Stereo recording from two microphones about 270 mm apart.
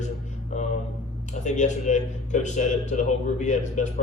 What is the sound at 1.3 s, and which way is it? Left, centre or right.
A man's voice, left.